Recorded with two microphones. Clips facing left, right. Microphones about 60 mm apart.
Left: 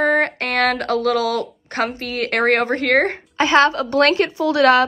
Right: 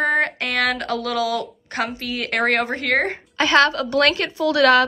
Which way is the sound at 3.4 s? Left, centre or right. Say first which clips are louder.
Left 2 dB; left.